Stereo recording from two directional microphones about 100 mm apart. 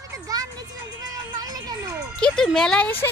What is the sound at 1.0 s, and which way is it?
Music, 40° right (ahead or behind).